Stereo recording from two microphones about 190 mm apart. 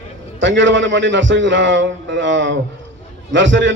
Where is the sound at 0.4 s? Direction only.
75° right (ahead or behind).